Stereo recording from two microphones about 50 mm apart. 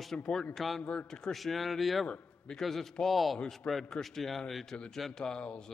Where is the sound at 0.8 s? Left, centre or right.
Centre.